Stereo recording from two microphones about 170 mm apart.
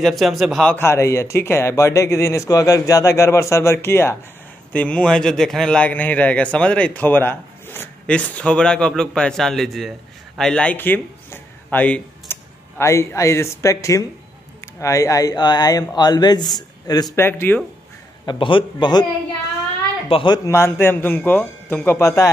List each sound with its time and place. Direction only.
0.0 s a man's voice: centre (ahead or behind)
0.7 s a man's voice: 15° left (ahead or behind)
18.2 s speech: 30° left (ahead or behind)
20.1 s a woman's voice: 30° left (ahead or behind)
20.4 s a man's voice: 15° left (ahead or behind)